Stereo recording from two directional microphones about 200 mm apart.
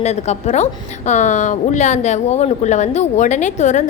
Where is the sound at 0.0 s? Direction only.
35° left (ahead or behind).